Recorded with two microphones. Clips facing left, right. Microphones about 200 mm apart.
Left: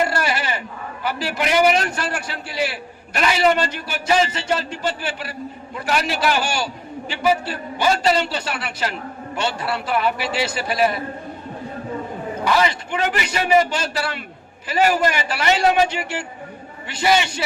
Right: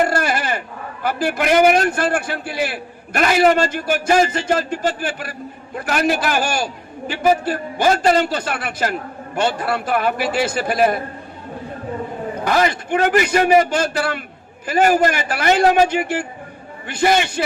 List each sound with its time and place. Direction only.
0.0 s a man's voice: 50° right (ahead or behind)
12.5 s a man's voice: 50° right (ahead or behind)